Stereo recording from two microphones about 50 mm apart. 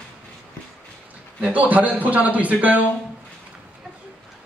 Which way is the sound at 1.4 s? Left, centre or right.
Right.